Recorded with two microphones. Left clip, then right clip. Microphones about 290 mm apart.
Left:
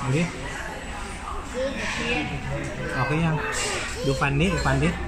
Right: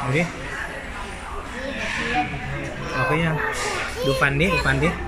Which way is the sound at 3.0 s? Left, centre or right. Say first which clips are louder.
Right 5 dB; right.